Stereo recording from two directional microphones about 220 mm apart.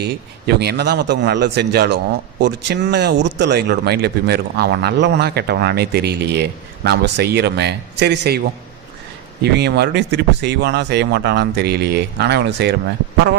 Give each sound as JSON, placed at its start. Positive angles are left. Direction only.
{"t": 0.0, "sound": "speech", "side_deg": -45}
{"t": 9.4, "sound": "speech", "side_deg": -50}